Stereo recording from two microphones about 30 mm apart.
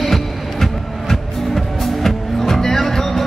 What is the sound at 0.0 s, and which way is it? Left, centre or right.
Music, centre.